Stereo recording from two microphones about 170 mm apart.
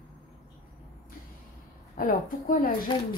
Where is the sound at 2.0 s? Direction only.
55° left (ahead or behind).